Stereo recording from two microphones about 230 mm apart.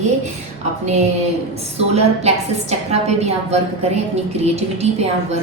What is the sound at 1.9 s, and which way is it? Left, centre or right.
A woman's voice, right.